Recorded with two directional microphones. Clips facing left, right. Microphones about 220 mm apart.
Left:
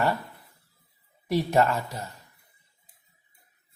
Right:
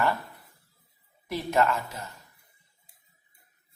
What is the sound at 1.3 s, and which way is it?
Speech, 35° left (ahead or behind).